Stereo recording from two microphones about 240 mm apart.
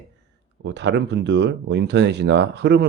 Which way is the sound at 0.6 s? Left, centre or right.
Right.